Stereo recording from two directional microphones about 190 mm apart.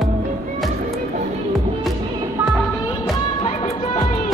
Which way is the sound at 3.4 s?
35° left (ahead or behind).